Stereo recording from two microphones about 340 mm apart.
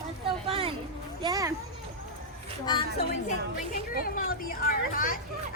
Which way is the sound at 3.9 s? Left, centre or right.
Left.